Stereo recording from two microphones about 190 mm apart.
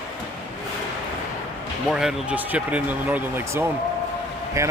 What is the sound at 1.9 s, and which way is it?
Speech, 5° right (ahead or behind).